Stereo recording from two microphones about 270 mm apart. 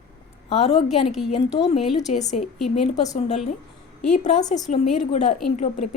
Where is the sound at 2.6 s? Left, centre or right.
Left.